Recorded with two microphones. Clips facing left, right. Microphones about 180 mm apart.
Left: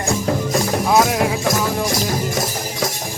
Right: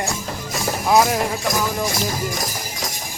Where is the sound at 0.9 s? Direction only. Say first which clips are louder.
Right 1 dB; centre (ahead or behind).